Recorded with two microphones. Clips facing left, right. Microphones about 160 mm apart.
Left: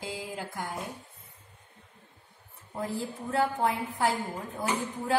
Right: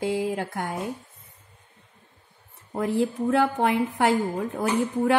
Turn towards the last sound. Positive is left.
turn(degrees=-75)  # may be behind; listen again after turning